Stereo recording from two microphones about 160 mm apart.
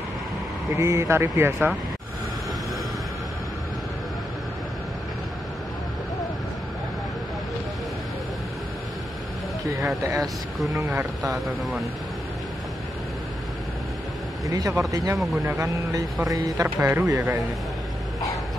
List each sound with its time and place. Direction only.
0.7 s speech: 20° right (ahead or behind)
10.7 s speech: 20° right (ahead or behind)
11.3 s speech: centre (ahead or behind)
14.5 s speech: 20° right (ahead or behind)
15.1 s speech: centre (ahead or behind)
15.4 s speech: 20° right (ahead or behind)